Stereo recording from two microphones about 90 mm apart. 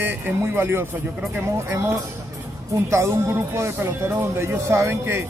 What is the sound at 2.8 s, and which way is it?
Speech, 30° right (ahead or behind).